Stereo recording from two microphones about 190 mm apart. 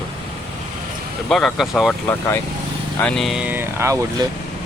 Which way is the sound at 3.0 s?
Centre (ahead or behind).